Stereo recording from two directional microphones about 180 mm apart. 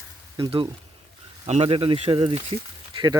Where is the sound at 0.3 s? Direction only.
25° right (ahead or behind).